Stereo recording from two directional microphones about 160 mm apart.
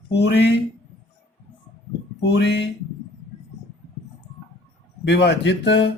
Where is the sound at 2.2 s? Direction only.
90° left.